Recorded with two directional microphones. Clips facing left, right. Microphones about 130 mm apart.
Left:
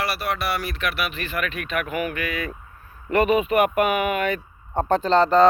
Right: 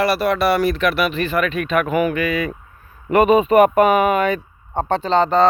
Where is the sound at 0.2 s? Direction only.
40° right (ahead or behind).